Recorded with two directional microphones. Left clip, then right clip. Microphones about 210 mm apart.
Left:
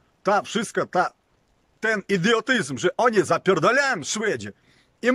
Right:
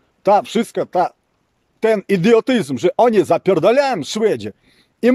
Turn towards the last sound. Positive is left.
turn(degrees=-20)  # may be behind; listen again after turning